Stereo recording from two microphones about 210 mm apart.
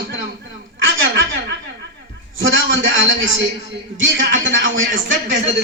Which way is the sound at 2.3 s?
65° right (ahead or behind).